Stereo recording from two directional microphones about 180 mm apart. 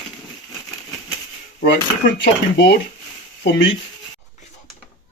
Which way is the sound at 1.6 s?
55° left (ahead or behind).